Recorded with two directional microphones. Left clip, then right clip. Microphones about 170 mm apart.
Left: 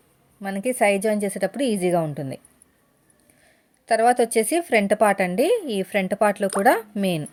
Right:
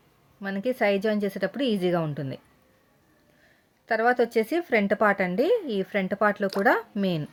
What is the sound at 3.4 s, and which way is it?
A woman's voice, 25° left (ahead or behind).